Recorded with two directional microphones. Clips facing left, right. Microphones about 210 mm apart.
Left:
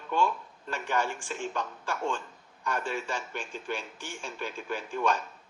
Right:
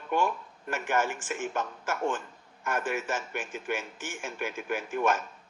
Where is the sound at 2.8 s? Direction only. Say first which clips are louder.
Right 4 dB; 15° right (ahead or behind).